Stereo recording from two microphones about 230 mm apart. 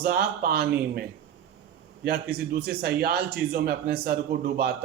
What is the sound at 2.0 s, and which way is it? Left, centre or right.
A man's voice, right.